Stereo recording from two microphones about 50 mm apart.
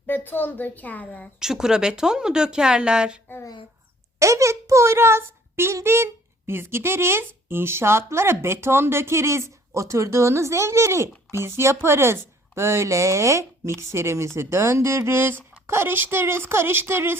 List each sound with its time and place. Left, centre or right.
0.1 s a child's voice: left
1.4 s speech: centre
4.2 s a child's voice: right
11.3 s a child's voice: right